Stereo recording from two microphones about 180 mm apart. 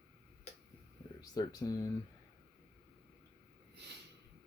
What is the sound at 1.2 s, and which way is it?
Speech, 20° left (ahead or behind).